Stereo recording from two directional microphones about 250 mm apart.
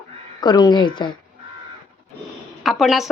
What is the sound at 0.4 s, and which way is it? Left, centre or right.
Speech, centre.